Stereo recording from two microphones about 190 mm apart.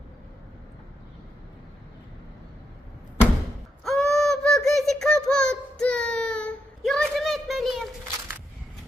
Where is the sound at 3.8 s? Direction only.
Centre (ahead or behind).